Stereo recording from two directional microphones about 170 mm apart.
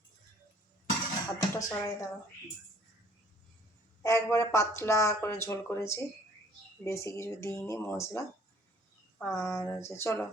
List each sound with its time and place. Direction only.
1.4 s speech: 20° left (ahead or behind)
4.0 s speech: 15° left (ahead or behind)
9.2 s speech: 15° left (ahead or behind)